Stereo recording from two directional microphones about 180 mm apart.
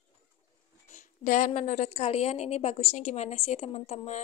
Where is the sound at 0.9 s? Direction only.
45° left (ahead or behind).